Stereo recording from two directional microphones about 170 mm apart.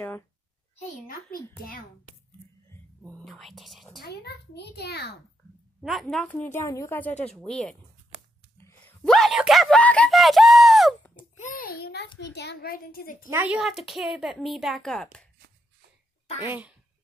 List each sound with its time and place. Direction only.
1.0 s a woman's voice: 60° left (ahead or behind)
3.3 s speech: centre (ahead or behind)
4.0 s a child's voice: 75° left (ahead or behind)
5.8 s a woman's voice: centre (ahead or behind)
8.5 s gasp: 15° left (ahead or behind)
9.0 s speech: centre (ahead or behind)
11.3 s a woman's voice: 50° left (ahead or behind)
13.3 s speech: 10° right (ahead or behind)
16.4 s speech: 5° right (ahead or behind)